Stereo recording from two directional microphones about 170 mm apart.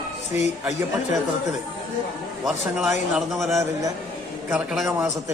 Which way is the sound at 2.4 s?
Centre (ahead or behind).